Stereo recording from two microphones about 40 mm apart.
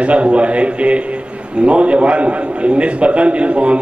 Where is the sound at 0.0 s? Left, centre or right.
Right.